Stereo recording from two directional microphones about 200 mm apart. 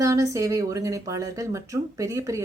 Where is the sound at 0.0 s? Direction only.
15° right (ahead or behind).